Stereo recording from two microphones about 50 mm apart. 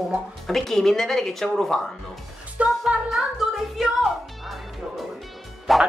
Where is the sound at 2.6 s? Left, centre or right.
Right.